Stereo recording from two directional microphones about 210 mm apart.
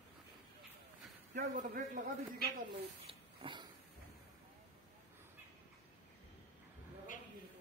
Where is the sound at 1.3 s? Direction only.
40° right (ahead or behind).